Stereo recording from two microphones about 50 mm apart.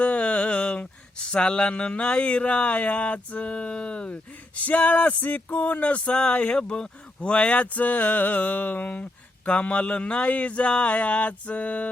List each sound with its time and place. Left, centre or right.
0.0 s a sound: left
1.3 s speech: left
6.6 s speech: centre
7.2 s mantra: left
9.5 s speech: left